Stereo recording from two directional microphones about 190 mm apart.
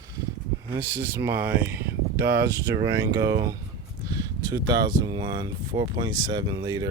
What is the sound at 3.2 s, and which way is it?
Speech, 15° right (ahead or behind).